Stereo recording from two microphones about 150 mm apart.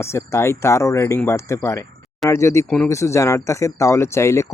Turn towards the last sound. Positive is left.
turn(degrees=20)  # may be behind; listen again after turning